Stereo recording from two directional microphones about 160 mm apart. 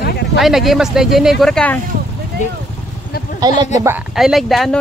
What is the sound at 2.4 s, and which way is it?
Speech, 50° left (ahead or behind).